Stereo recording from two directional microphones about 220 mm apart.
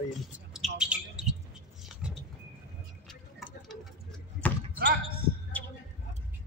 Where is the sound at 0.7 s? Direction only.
5° right (ahead or behind).